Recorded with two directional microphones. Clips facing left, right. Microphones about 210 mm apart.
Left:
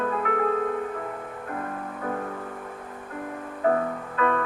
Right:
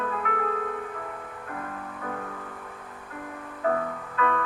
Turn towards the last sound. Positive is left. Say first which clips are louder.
# left 3 dB
turn(degrees=35)  # may be behind; listen again after turning